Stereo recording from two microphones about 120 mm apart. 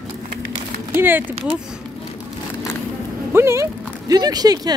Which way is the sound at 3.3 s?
20° right (ahead or behind).